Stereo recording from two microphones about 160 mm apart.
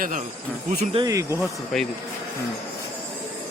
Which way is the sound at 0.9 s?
20° right (ahead or behind).